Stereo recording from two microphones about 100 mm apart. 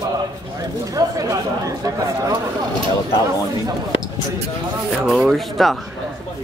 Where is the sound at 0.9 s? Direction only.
35° right (ahead or behind).